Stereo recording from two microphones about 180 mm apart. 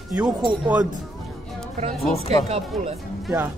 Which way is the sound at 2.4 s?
35° right (ahead or behind).